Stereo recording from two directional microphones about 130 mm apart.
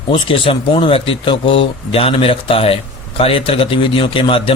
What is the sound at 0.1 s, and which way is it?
A man's voice, 40° left (ahead or behind).